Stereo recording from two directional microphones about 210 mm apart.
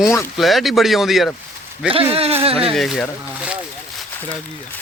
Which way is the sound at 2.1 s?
30° right (ahead or behind).